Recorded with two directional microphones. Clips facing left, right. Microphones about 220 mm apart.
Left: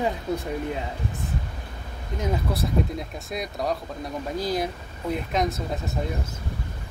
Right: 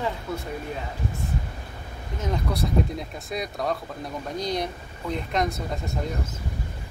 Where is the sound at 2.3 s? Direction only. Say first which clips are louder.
Right 1 dB; centre (ahead or behind).